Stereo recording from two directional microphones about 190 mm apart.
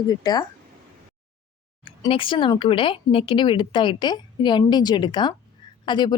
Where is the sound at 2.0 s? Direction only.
25° left (ahead or behind).